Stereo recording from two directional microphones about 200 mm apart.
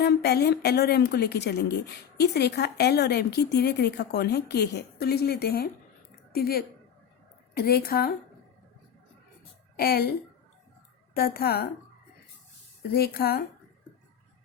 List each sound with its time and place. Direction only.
0.0 s a woman's voice: 55° left (ahead or behind)
9.7 s a woman's voice: 50° left (ahead or behind)
12.9 s a woman's voice: 50° left (ahead or behind)